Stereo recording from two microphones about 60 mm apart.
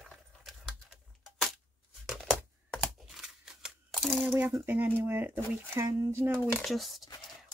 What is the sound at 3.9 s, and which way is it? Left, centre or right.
Crumpling, centre.